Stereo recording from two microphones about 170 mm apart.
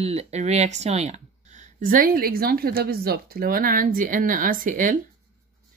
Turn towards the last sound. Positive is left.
turn(degrees=-55)  # may be behind; listen again after turning